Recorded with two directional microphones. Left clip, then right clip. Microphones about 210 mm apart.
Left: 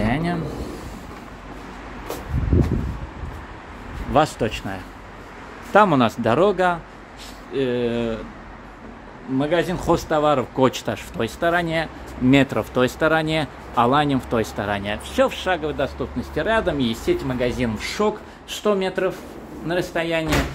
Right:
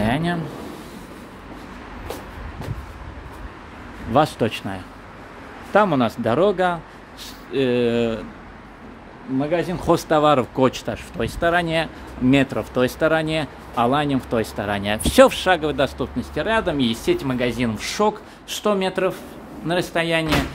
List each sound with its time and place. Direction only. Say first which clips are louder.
0.0 s a sound: right 1 dB; 10° right (ahead or behind)
4.1 s speech: right 1 dB; 15° right (ahead or behind)
5.7 s speech: left 2 dB; 5° left (ahead or behind)
7.5 s speech: right 3 dB; 20° right (ahead or behind)
9.4 s speech: left 1 dB; 5° right (ahead or behind)
9.9 s speech: right 3 dB; 15° right (ahead or behind)
10.6 s speech: even; centre (ahead or behind)
12.4 s speech: left 2 dB; 5° left (ahead or behind)
15.1 s speech: right 6 dB; 25° right (ahead or behind)
16.2 s speech: left 1 dB; centre (ahead or behind)